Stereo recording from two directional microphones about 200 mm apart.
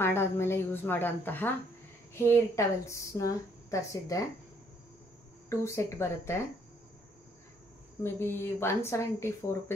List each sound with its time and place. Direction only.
0.0 s a woman's voice: 10° left (ahead or behind)
5.5 s a woman's voice: 15° left (ahead or behind)
8.0 s a woman's voice: 10° left (ahead or behind)